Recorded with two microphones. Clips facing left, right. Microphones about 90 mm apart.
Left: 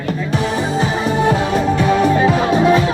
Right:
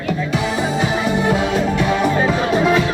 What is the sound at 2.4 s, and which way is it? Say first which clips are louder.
Music: left 2 dB; 30° left (ahead or behind).